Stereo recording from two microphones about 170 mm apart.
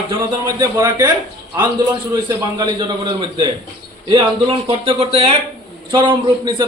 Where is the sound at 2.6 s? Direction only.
25° right (ahead or behind).